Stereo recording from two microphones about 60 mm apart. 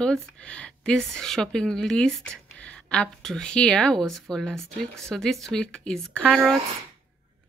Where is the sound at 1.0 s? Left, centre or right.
Centre.